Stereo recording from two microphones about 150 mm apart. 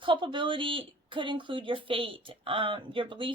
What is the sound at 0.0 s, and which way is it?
Speech, 35° right (ahead or behind).